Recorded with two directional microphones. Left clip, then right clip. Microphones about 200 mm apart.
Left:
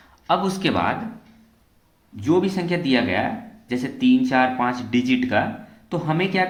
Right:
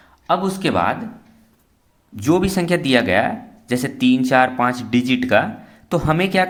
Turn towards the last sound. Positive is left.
turn(degrees=-40)  # may be behind; listen again after turning